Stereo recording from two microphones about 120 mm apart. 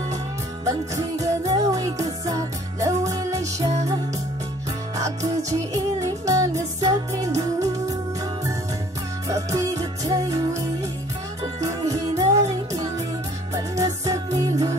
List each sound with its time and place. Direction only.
0.7 s music: 25° right (ahead or behind)
4.9 s music: 25° right (ahead or behind)
9.3 s music: 25° right (ahead or behind)
11.6 s music: 25° right (ahead or behind)